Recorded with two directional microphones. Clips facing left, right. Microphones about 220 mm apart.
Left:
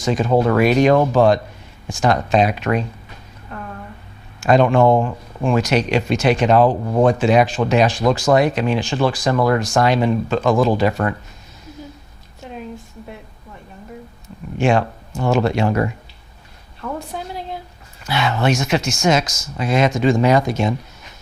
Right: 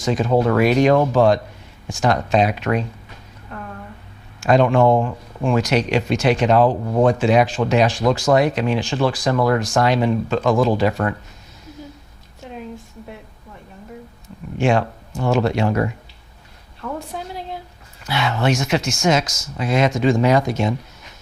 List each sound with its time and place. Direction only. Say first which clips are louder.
0.0 s speech: left 1 dB; 25° left (ahead or behind)
1.0 s speech: left 1 dB; 25° left (ahead or behind)
4.4 s speech: left 1 dB; 15° left (ahead or behind)
5.6 s speech: left 1 dB; 10° left (ahead or behind)
6.7 s speech: left 1 dB; 30° left (ahead or behind)
8.0 s speech: left 1 dB; 25° left (ahead or behind)
8.4 s speech: left 1 dB; 15° left (ahead or behind)
14.6 s speech: left 1 dB; 20° left (ahead or behind)
18.1 s speech: left 1 dB; 10° left (ahead or behind)